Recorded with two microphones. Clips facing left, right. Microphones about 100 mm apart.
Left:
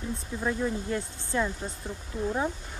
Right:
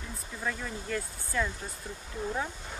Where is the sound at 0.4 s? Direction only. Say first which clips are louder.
Left 6 dB; 20° left (ahead or behind).